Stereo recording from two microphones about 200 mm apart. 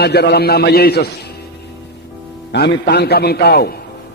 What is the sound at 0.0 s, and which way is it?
A man's voice, 55° left (ahead or behind).